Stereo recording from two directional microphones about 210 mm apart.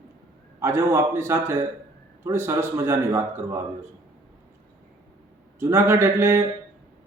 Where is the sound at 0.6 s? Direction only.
15° right (ahead or behind).